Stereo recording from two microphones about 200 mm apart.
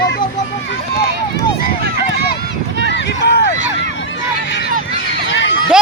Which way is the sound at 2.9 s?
60° left (ahead or behind).